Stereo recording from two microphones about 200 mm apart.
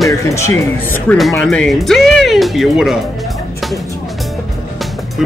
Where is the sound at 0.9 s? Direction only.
5° left (ahead or behind).